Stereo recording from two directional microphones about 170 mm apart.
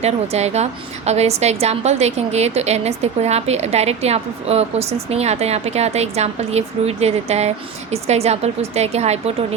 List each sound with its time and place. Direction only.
0.0 s a woman's voice: 40° right (ahead or behind)